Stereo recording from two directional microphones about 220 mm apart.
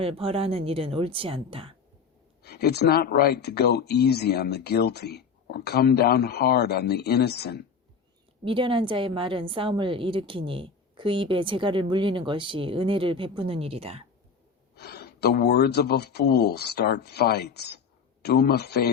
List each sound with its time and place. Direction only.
0.0 s a woman's voice: 25° right (ahead or behind)
2.4 s speech: 45° left (ahead or behind)
8.4 s a woman's voice: 25° right (ahead or behind)
14.8 s speech: 45° left (ahead or behind)